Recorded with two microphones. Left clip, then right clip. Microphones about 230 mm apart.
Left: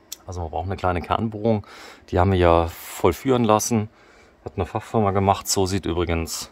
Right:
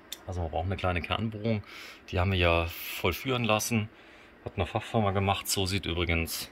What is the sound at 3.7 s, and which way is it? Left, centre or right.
Speech, left.